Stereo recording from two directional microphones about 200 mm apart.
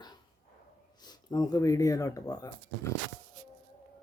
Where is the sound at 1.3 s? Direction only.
20° left (ahead or behind).